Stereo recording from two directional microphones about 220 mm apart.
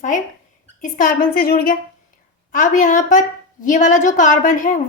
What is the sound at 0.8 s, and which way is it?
A woman's voice, 35° left (ahead or behind).